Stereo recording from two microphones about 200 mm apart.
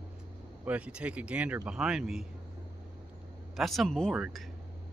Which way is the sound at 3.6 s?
Centre (ahead or behind).